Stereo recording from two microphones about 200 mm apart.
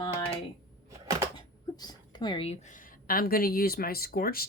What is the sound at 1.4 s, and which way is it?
A woman's voice, 20° left (ahead or behind).